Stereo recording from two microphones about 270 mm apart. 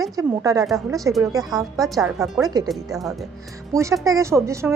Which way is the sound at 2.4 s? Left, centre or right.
Centre.